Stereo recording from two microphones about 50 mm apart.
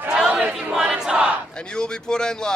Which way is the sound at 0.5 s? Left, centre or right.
Right.